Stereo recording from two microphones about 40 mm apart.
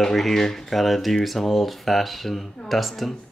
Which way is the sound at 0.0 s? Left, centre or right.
Centre.